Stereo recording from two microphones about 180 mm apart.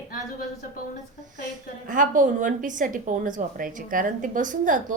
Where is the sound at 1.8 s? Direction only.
45° right (ahead or behind).